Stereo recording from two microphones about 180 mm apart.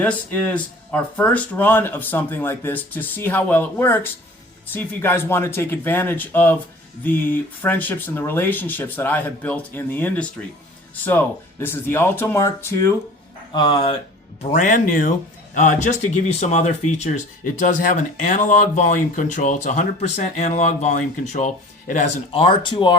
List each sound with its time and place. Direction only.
0.0 s speech: 10° left (ahead or behind)
13.5 s speech: 25° left (ahead or behind)
14.4 s speech: 45° left (ahead or behind); by 23.0 s 25° left (ahead or behind)